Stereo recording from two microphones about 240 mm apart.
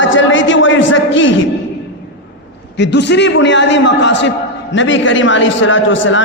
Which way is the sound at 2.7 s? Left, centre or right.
Left.